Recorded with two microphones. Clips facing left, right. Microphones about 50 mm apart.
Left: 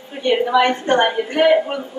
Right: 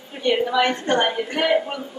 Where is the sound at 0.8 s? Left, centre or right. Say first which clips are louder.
Left 4 dB; left.